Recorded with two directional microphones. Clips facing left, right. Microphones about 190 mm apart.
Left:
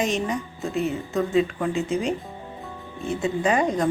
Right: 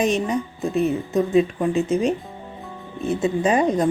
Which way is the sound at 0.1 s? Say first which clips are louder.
Right 4 dB; 20° right (ahead or behind).